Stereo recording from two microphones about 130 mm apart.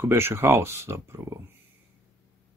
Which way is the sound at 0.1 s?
20° right (ahead or behind).